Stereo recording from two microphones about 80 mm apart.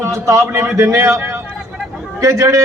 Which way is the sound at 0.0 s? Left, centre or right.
Right.